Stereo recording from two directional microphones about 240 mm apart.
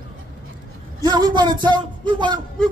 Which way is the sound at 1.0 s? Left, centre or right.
Centre.